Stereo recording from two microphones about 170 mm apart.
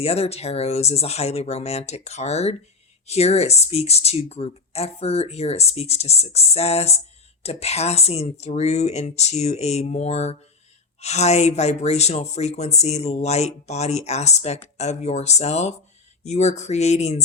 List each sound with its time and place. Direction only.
0.0 s speech: 35° left (ahead or behind)